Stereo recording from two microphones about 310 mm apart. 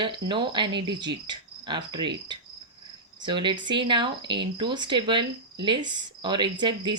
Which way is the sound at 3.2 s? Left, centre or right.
Centre.